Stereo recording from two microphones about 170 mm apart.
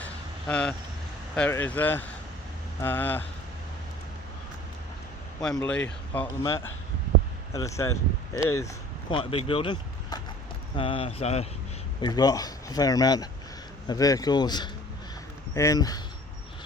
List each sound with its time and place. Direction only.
0.0 s vehicle: 10° left (ahead or behind)
1.4 s speech: 10° left (ahead or behind)
5.6 s speech: 10° left (ahead or behind)
7.5 s speech: 20° left (ahead or behind)
9.0 s speech: 30° left (ahead or behind)
11.9 s speech: 25° left (ahead or behind)